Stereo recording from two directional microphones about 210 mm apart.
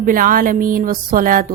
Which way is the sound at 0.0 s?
40° right (ahead or behind).